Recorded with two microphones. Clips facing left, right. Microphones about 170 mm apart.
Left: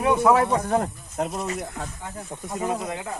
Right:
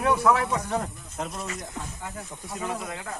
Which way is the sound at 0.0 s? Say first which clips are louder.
Left 3 dB; 25° left (ahead or behind).